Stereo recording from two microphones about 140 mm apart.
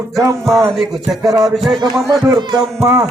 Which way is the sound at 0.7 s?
Centre (ahead or behind).